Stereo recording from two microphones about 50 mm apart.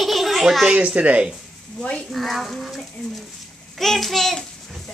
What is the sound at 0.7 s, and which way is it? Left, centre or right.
Speech, right.